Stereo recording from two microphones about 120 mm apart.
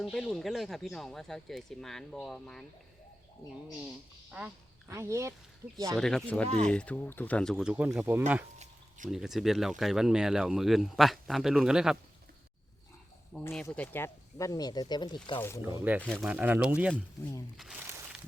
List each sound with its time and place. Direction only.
0.0 s speech: centre (ahead or behind)
4.3 s speech: 10° right (ahead or behind)
4.9 s speech: 25° right (ahead or behind)
6.0 s speech: 5° left (ahead or behind)
7.6 s speech: 10° right (ahead or behind)
9.0 s speech: 5° right (ahead or behind)
13.5 s speech: 5° left (ahead or behind); by 15.4 s 35° left (ahead or behind)
15.4 s speech: 20° left (ahead or behind)
15.6 s speech: 20° right (ahead or behind)
16.0 s speech: 5° left (ahead or behind)
16.2 s speech: 10° right (ahead or behind)
17.6 s crumpling: 5° right (ahead or behind)